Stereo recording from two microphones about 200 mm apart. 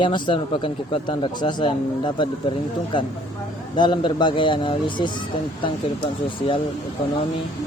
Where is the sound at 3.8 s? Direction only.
20° left (ahead or behind).